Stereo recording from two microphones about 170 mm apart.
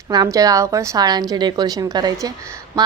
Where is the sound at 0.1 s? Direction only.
20° right (ahead or behind).